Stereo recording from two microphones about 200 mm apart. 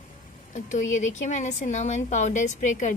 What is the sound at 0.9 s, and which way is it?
A woman's voice, 35° left (ahead or behind).